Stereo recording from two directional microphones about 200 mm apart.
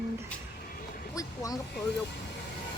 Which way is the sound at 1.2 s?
20° left (ahead or behind).